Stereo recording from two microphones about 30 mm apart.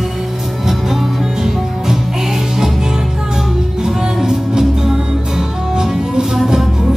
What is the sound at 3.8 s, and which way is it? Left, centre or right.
Music, centre.